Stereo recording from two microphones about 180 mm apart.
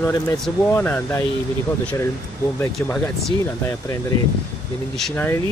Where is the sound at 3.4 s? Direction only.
15° left (ahead or behind).